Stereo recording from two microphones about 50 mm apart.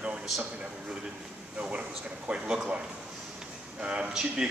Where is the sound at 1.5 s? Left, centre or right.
Right.